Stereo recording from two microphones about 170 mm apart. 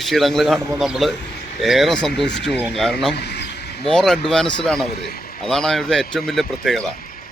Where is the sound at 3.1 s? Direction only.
75° left (ahead or behind).